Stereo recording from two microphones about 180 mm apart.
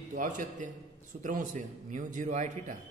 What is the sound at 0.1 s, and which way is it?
A man's voice, 45° right (ahead or behind).